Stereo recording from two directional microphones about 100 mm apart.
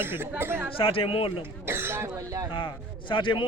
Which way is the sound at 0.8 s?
65° left (ahead or behind).